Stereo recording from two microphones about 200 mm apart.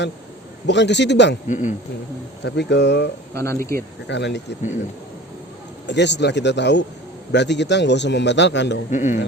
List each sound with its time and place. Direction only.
0.7 s a man's voice: 60° left (ahead or behind)
1.5 s a man's voice: 35° left (ahead or behind)
2.4 s a man's voice: 60° left (ahead or behind)
3.3 s speech: 15° left (ahead or behind)
4.1 s a man's voice: 60° left (ahead or behind)
5.8 s a man's voice: 60° left (ahead or behind)
8.9 s a man's voice: 35° left (ahead or behind)